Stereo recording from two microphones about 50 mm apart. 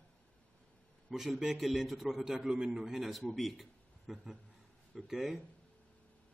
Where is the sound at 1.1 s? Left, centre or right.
Centre.